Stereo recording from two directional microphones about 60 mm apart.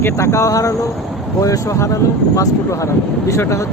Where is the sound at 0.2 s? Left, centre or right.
Left.